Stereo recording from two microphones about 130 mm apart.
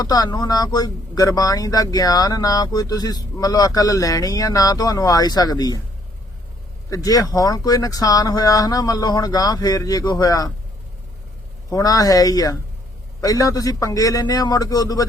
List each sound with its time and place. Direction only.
0.0 s speech: 30° left (ahead or behind)
6.9 s speech: 30° left (ahead or behind)
11.7 s speech: 25° left (ahead or behind)